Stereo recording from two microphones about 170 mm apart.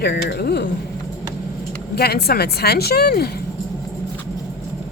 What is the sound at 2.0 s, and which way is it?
Speech, 70° left (ahead or behind).